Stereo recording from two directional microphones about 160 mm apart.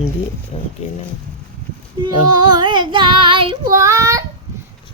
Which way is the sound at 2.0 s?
25° right (ahead or behind).